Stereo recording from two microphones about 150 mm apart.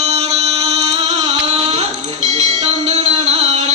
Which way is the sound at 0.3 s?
45° right (ahead or behind).